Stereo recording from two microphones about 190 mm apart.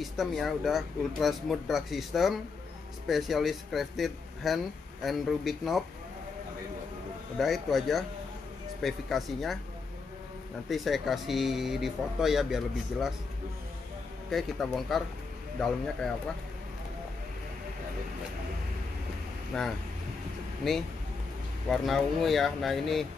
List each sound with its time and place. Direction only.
0.0 s speech: centre (ahead or behind)
7.3 s speech: centre (ahead or behind)
10.7 s speech: centre (ahead or behind)
14.3 s speech: centre (ahead or behind)
19.5 s speech: centre (ahead or behind)